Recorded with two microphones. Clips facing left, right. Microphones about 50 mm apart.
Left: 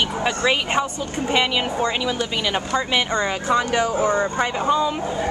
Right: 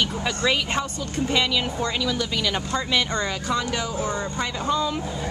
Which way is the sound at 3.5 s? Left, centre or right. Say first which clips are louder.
Left 6 dB; left.